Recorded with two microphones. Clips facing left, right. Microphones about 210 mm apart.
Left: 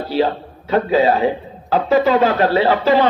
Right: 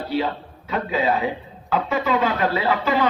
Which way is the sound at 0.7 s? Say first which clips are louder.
Left 7 dB; 35° left (ahead or behind).